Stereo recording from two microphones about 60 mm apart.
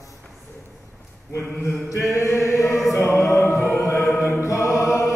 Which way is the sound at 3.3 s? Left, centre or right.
Left.